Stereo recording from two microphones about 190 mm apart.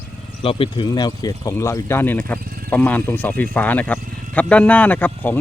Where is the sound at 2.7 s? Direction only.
10° left (ahead or behind).